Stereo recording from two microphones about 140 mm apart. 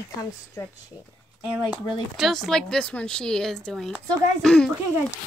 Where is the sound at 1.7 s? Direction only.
Centre (ahead or behind).